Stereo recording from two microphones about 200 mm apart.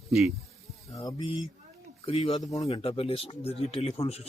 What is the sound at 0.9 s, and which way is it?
Speech, 20° left (ahead or behind).